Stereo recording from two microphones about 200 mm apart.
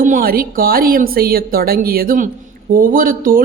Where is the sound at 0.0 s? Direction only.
45° right (ahead or behind).